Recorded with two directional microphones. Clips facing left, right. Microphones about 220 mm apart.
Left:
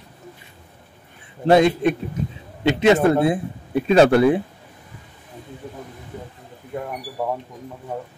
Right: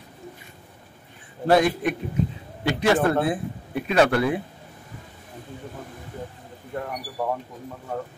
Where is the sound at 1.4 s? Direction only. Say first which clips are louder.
Left 4 dB; 25° left (ahead or behind).